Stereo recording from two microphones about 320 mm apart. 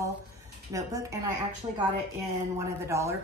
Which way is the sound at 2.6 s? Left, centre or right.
Centre.